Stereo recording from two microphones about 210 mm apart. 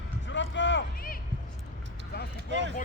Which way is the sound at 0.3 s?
60° left (ahead or behind).